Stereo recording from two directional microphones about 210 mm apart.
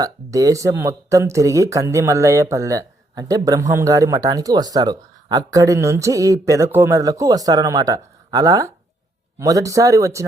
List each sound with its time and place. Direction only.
0.0 s speech: 15° right (ahead or behind)